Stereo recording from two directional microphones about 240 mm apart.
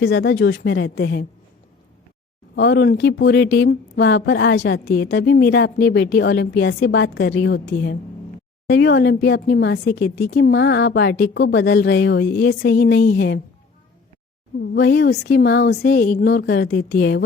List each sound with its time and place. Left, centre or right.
0.0 s speech: left
2.6 s speech: left
14.6 s speech: left